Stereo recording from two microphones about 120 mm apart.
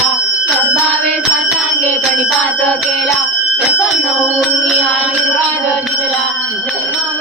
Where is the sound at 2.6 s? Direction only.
5° left (ahead or behind).